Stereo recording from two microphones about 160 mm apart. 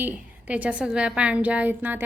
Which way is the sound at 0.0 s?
10° right (ahead or behind).